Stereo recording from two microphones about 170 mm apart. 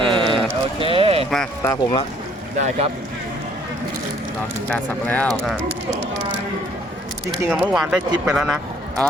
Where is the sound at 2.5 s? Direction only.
45° right (ahead or behind).